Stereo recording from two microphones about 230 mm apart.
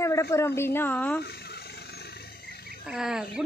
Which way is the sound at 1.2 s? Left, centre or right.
Left.